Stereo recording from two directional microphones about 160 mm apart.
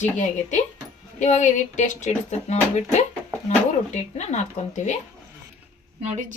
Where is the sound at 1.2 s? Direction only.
50° left (ahead or behind).